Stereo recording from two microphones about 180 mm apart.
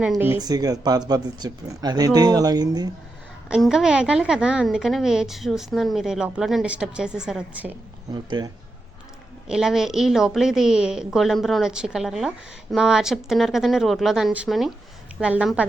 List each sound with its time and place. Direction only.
0.0 s speech: 10° right (ahead or behind)
3.5 s a woman's voice: 5° right (ahead or behind)
8.1 s speech: 25° right (ahead or behind)
9.5 s a woman's voice: 5° right (ahead or behind)